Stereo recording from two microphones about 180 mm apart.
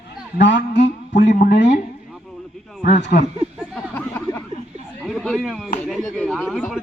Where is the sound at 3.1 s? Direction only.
60° left (ahead or behind).